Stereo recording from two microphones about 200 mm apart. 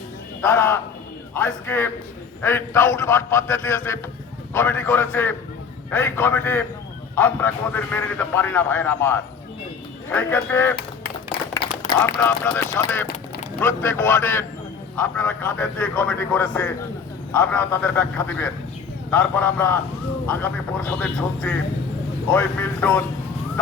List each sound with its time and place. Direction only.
0.4 s a man's voice: 10° left (ahead or behind)
10.8 s a sound: 50° left (ahead or behind)
11.9 s a man's voice: 10° left (ahead or behind)